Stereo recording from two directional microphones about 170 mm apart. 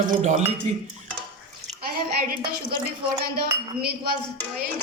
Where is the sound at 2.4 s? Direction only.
65° right (ahead or behind).